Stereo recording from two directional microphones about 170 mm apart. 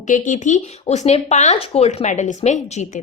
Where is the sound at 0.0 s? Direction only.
45° left (ahead or behind).